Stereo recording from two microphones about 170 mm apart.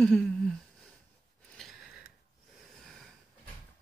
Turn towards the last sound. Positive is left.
turn(degrees=5)  # may be behind; listen again after turning